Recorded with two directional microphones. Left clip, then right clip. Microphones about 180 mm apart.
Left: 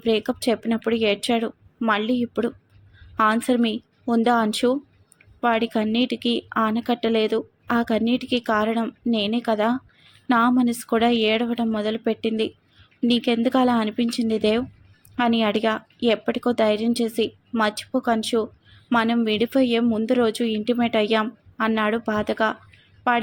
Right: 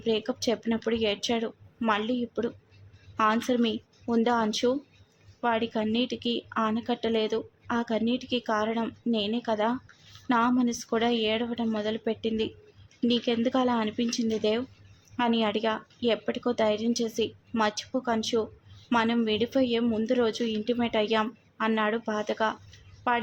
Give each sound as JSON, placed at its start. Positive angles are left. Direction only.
{"t": 0.0, "sound": "a woman's voice", "side_deg": 15}